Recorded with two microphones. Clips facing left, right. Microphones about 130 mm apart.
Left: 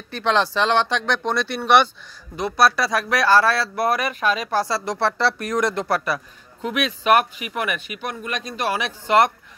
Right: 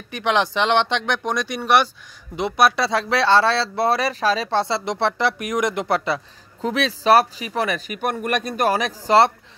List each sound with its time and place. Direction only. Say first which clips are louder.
0.1 s speech: even; 15° right (ahead or behind)
2.3 s speech: right 1 dB; 20° right (ahead or behind)
8.0 s a man's voice: right 6 dB; 55° right (ahead or behind); by 9.3 s 35° right (ahead or behind)